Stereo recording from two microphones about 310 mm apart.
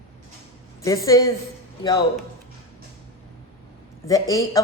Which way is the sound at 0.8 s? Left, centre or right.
Centre.